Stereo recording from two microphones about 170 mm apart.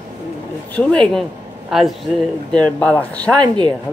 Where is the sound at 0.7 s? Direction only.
5° left (ahead or behind).